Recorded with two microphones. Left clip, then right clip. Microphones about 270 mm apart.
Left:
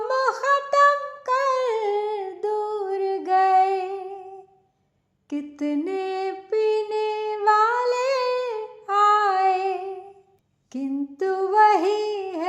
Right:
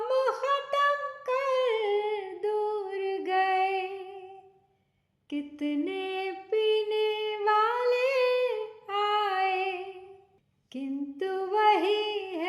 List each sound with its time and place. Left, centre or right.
0.0 s music: centre
5.3 s music: centre
10.7 s a sound: centre